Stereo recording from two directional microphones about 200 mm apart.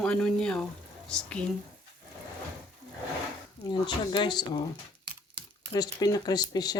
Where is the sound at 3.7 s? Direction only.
25° left (ahead or behind).